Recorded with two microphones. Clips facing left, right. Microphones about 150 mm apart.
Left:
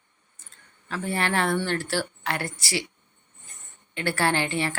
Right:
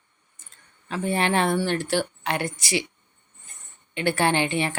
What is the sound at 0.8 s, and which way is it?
A woman's voice, 20° right (ahead or behind).